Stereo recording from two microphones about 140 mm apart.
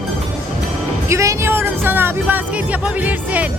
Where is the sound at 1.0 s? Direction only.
20° right (ahead or behind).